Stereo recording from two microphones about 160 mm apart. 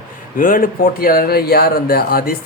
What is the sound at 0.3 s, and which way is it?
Speech, 60° left (ahead or behind).